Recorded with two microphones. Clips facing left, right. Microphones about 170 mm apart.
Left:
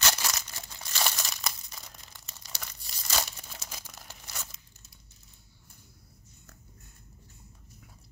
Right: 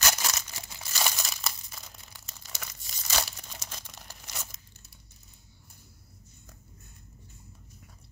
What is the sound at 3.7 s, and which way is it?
Crumpling, 5° left (ahead or behind).